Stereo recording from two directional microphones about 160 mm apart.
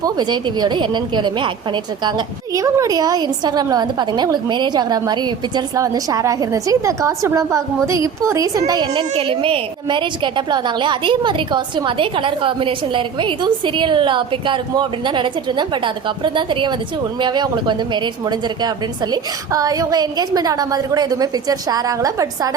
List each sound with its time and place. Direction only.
0.0 s a woman's voice: 25° right (ahead or behind)
8.9 s a woman's voice: 35° right (ahead or behind)